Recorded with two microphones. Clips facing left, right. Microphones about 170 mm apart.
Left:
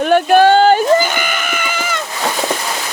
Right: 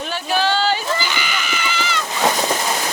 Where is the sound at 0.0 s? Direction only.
60° left (ahead or behind).